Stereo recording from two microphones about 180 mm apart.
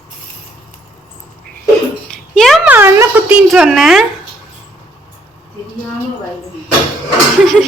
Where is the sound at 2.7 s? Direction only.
10° right (ahead or behind).